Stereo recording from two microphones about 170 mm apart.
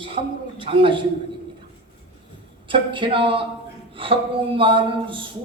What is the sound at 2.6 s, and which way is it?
A man's voice, 30° right (ahead or behind).